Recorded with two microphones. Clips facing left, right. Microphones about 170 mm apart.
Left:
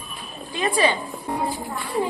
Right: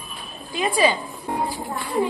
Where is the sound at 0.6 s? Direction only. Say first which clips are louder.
Right 1 dB; 20° right (ahead or behind).